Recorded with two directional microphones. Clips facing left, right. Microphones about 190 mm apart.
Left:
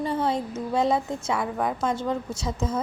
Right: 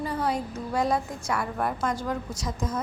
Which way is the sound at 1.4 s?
Centre (ahead or behind).